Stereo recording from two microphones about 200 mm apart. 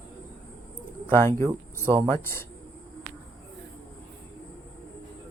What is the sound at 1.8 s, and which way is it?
Speech, 25° right (ahead or behind).